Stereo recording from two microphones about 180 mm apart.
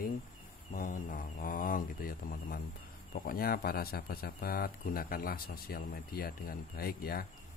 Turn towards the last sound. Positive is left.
turn(degrees=55)  # may be behind; listen again after turning